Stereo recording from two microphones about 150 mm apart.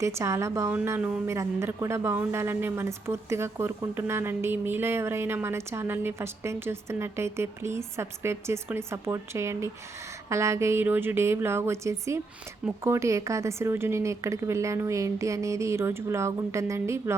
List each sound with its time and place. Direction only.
0.0 s a woman's voice: 20° right (ahead or behind)